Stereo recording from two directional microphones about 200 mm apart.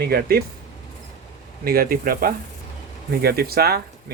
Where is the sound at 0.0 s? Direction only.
50° right (ahead or behind).